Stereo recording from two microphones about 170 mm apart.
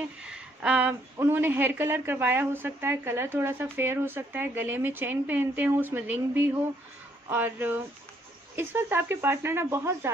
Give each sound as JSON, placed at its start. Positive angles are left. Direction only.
{"t": 0.2, "sound": "a woman's voice", "side_deg": -5}